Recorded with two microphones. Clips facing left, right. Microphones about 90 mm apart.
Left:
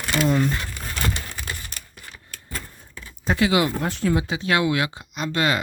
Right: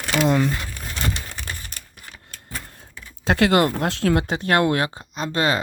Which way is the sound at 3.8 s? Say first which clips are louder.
Right 2 dB; 75° right (ahead or behind).